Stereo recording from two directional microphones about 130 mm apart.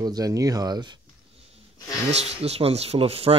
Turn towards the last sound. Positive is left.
turn(degrees=-45)  # may be behind; listen again after turning